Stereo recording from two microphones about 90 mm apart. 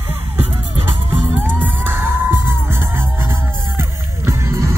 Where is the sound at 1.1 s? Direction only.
20° right (ahead or behind).